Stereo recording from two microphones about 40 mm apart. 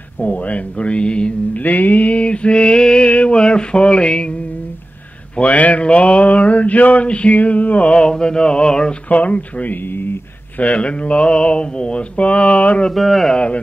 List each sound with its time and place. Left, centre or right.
0.2 s mantra: left
1.5 s mantra: left
3.1 s a sound: left
5.3 s mantra: left
9.1 s mantra: left
9.8 s speech: left
10.6 s mantra: left
12.9 s a man's voice: centre